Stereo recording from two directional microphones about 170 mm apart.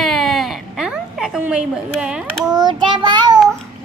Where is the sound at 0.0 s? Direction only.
Centre (ahead or behind).